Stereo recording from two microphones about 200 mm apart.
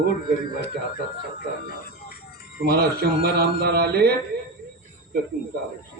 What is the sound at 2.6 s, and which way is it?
A man's voice, 50° right (ahead or behind).